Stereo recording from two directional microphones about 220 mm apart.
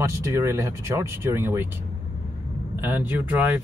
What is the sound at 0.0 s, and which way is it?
Speech, 10° right (ahead or behind).